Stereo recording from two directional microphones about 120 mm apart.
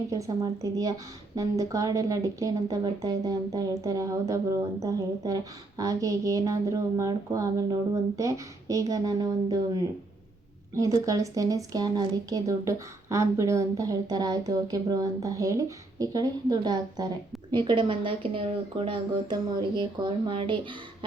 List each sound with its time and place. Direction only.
0.1 s speech: 30° right (ahead or behind); by 20.7 s 45° right (ahead or behind)